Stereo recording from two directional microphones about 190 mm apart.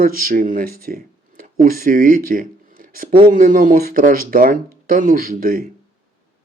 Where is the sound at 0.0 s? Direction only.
50° right (ahead or behind).